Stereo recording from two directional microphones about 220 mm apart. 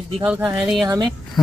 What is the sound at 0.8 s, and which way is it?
Speech, 15° right (ahead or behind).